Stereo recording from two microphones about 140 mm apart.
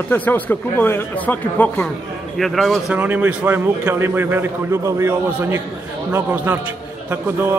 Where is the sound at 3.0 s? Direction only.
10° right (ahead or behind).